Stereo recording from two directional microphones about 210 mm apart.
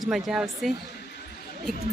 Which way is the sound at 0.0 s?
Centre (ahead or behind).